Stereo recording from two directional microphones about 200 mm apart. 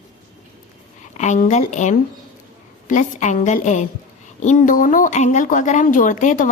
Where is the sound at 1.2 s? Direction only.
35° left (ahead or behind).